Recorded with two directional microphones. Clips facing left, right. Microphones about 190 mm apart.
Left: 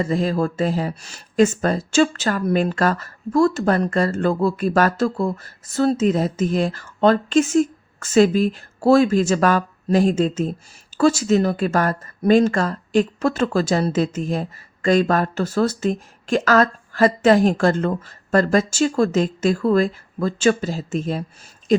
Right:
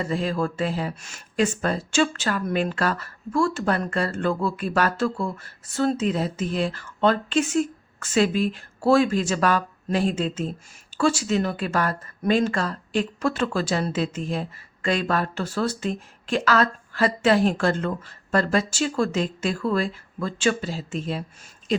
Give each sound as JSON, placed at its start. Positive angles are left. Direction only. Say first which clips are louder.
{"t": 0.0, "sound": "speech", "louder": "left 5 dB", "side_deg": 40}